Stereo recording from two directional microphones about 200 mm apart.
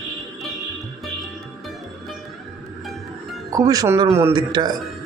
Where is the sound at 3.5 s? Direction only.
20° right (ahead or behind).